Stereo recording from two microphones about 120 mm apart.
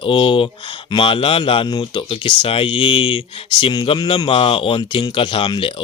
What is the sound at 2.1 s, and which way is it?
Speech, 45° left (ahead or behind).